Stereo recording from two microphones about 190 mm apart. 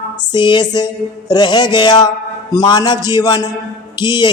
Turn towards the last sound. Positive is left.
turn(degrees=25)  # may be behind; listen again after turning